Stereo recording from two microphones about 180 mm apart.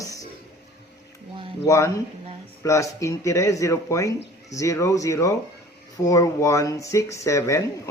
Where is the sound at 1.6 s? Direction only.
15° left (ahead or behind).